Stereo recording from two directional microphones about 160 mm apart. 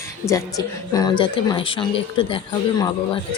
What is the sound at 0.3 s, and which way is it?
A woman's voice, 20° left (ahead or behind).